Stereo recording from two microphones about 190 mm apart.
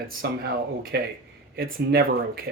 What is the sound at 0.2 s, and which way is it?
A man's voice, 60° right (ahead or behind).